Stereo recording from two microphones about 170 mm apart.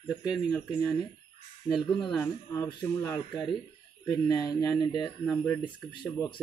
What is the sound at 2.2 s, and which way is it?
Speech, 20° left (ahead or behind).